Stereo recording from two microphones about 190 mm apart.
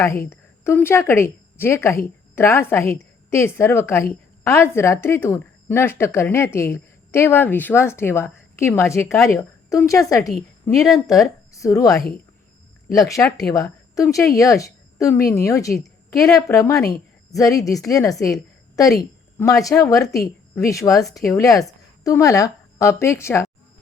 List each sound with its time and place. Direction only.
0.0 s a woman's voice: 15° left (ahead or behind)
11.5 s a woman's voice: 15° left (ahead or behind)
19.4 s a woman's voice: 15° left (ahead or behind)